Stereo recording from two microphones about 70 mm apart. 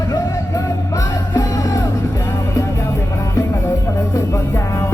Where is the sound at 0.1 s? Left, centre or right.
Left.